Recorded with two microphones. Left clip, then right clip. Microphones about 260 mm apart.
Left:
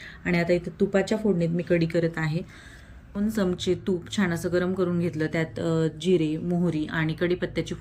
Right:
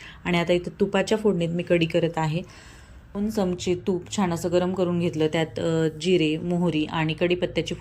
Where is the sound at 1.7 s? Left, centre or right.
Right.